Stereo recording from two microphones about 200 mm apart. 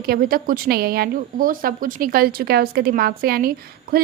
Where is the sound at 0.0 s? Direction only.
45° right (ahead or behind).